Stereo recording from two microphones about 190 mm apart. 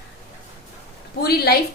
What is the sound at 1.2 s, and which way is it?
Speech, 55° left (ahead or behind).